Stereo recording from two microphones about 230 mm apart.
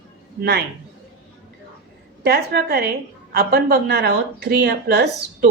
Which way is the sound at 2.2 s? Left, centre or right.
Right.